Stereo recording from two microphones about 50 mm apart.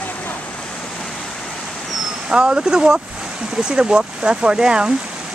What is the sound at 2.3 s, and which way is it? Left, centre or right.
Speech, centre.